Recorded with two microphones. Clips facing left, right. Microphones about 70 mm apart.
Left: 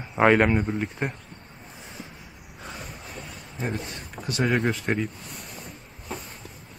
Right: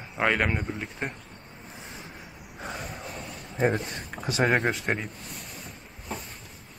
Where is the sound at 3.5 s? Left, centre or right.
Right.